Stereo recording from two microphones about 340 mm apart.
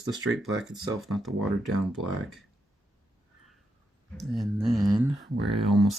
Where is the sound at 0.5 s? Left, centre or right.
Centre.